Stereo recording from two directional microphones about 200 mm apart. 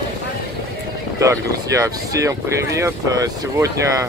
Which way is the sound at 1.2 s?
15° right (ahead or behind).